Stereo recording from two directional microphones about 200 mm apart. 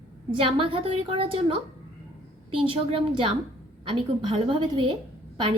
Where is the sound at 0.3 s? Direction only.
25° right (ahead or behind).